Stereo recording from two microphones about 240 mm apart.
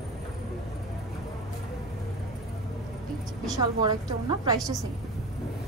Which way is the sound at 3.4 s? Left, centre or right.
Centre.